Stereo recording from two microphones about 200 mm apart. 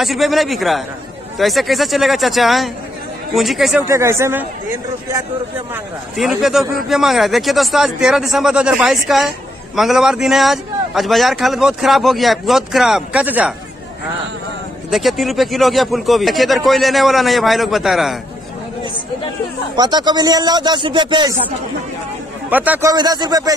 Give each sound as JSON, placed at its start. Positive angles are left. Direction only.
{"t": 0.0, "sound": "a man's voice", "side_deg": 0}
{"t": 3.9, "sound": "speech", "side_deg": -15}
{"t": 6.1, "sound": "a man's voice", "side_deg": 0}
{"t": 14.9, "sound": "a man's voice", "side_deg": 0}
{"t": 19.8, "sound": "speech", "side_deg": -20}
{"t": 22.5, "sound": "speech", "side_deg": -10}